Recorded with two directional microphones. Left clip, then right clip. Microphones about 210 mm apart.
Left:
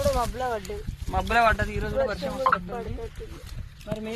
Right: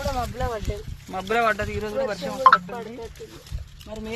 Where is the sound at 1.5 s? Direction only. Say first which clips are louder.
Right 1 dB; 25° left (ahead or behind).